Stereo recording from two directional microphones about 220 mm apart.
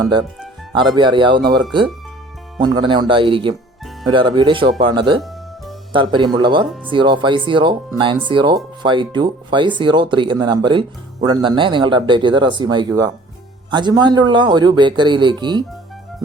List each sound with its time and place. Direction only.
0.0 s speech: 20° right (ahead or behind)
6.7 s speech: centre (ahead or behind)
6.9 s speech: 20° right (ahead or behind)